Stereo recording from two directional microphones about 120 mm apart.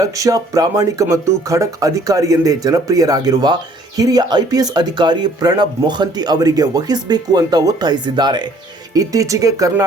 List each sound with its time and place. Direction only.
0.0 s speech: 30° right (ahead or behind)